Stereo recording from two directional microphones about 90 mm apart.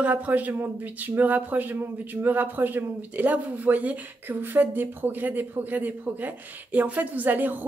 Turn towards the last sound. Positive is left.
turn(degrees=-20)  # may be behind; listen again after turning